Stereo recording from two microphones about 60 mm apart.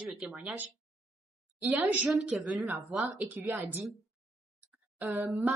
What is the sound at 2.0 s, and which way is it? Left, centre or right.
Speech, centre.